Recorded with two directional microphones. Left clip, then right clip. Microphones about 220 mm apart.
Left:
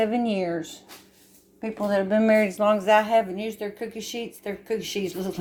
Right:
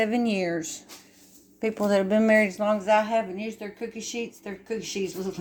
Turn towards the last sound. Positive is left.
turn(degrees=30)  # may be behind; listen again after turning